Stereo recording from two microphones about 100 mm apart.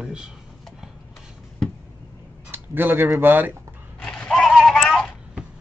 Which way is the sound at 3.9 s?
10° left (ahead or behind).